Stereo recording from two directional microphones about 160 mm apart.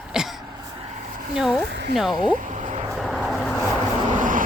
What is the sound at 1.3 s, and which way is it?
Speech, centre (ahead or behind).